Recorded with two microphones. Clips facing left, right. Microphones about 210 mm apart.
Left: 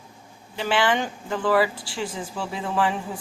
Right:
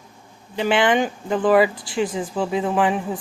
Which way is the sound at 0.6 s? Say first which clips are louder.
Right 5 dB; 20° right (ahead or behind).